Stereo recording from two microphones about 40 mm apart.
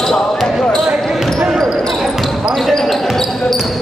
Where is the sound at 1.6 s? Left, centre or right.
Centre.